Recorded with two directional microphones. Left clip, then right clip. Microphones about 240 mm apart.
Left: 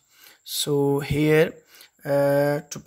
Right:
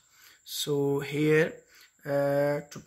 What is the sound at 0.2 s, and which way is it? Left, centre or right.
Speech, left.